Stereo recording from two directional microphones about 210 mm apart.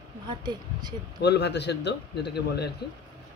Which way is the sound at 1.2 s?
55° left (ahead or behind).